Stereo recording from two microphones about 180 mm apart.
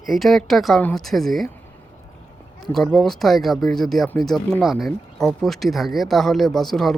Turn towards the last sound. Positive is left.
turn(degrees=0)  # may be behind; listen again after turning